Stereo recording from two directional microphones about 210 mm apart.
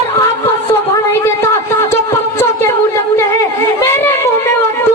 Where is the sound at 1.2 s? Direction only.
10° left (ahead or behind).